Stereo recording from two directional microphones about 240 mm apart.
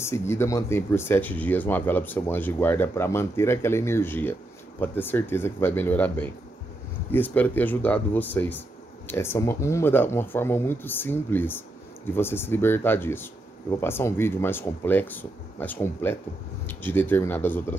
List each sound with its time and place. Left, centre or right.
0.0 s speech: centre